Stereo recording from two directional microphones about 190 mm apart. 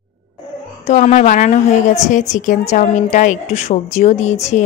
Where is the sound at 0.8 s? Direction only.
40° left (ahead or behind).